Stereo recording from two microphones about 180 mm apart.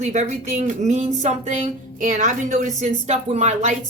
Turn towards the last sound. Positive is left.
turn(degrees=-40)  # may be behind; listen again after turning